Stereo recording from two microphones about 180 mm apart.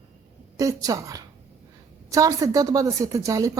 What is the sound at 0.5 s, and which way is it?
A woman's voice, 20° right (ahead or behind).